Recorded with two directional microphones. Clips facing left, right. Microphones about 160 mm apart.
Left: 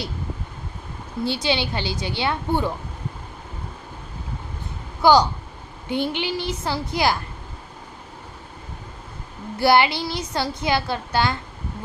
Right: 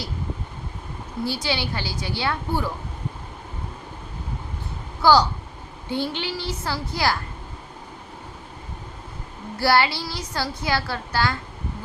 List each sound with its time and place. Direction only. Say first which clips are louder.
1.2 s a woman's voice: left 3 dB; 20° left (ahead or behind)
5.0 s a woman's voice: left 1 dB; 20° left (ahead or behind)
9.6 s a woman's voice: left 3 dB; 20° left (ahead or behind)